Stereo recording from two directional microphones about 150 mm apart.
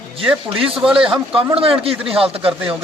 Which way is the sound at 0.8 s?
5° right (ahead or behind).